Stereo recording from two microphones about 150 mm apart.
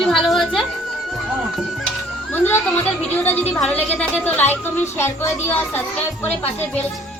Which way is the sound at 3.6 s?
10° left (ahead or behind).